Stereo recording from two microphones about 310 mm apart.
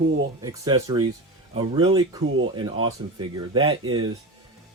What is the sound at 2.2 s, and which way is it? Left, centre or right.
Speech, right.